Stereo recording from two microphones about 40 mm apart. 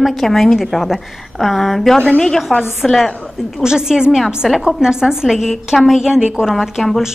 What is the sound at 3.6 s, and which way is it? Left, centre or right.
Speech, centre.